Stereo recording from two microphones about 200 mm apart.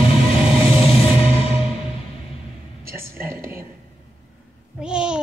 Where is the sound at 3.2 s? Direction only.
10° right (ahead or behind).